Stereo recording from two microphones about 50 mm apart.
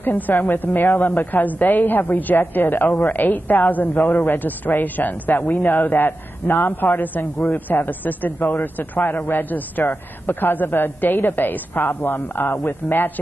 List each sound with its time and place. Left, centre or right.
0.0 s a woman's voice: left